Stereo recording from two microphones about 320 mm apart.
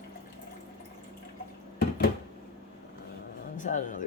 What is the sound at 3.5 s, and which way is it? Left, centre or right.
Speech, left.